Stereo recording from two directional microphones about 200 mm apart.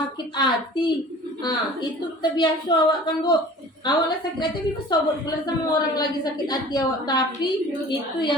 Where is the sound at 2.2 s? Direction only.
20° left (ahead or behind).